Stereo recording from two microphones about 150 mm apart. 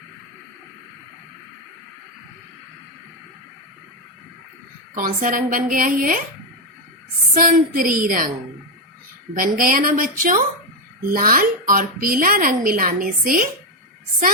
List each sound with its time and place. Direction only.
4.9 s a woman's voice: 65° right (ahead or behind)
7.3 s a woman's voice: 65° right (ahead or behind)
9.6 s a woman's voice: 70° right (ahead or behind)